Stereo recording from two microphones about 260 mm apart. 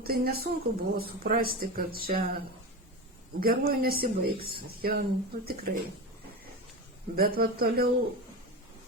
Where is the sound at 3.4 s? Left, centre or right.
Right.